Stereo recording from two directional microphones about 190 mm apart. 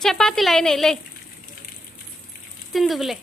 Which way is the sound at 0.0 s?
Centre (ahead or behind).